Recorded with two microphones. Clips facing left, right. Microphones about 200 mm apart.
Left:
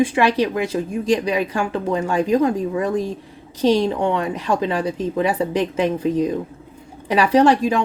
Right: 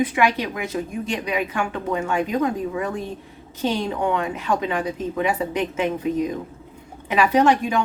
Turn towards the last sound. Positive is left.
turn(degrees=35)  # may be behind; listen again after turning